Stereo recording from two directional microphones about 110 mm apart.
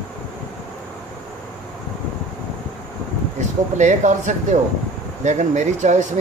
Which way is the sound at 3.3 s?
90° right.